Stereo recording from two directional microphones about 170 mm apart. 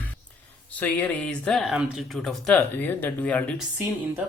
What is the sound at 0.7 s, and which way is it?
Speech, 10° left (ahead or behind).